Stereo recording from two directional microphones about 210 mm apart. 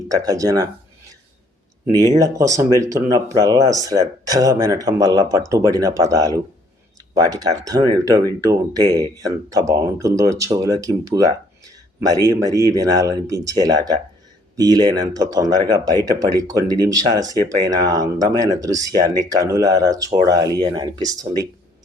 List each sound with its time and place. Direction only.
0.1 s speech: 15° right (ahead or behind)
2.0 s speech: 15° right (ahead or behind)